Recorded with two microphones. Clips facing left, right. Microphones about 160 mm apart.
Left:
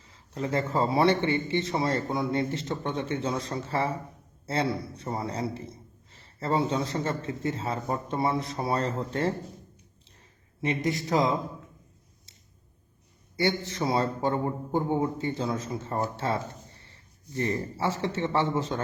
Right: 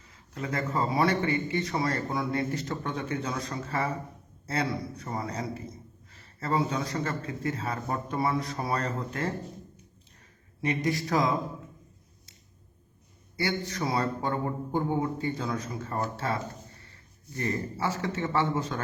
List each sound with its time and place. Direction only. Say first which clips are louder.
0.1 s a man's voice: left 4 dB; 30° left (ahead or behind)
10.8 s a man's voice: left 2 dB; 20° left (ahead or behind)
13.3 s a man's voice: left 3 dB; 25° left (ahead or behind)